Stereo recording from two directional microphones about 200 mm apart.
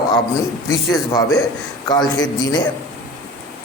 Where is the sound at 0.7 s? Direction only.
15° left (ahead or behind).